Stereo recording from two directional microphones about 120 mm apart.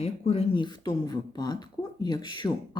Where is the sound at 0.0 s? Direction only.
60° left (ahead or behind).